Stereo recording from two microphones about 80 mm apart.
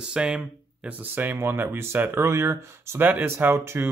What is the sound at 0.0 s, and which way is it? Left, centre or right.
Speech, centre.